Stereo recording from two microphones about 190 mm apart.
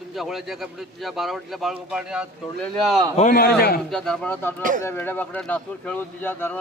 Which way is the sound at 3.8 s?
5° left (ahead or behind).